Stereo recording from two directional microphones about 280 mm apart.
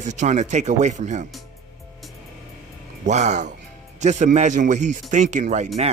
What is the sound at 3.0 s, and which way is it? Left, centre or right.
Speech, right.